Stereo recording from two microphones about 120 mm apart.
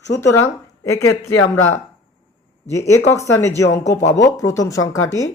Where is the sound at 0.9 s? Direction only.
25° left (ahead or behind).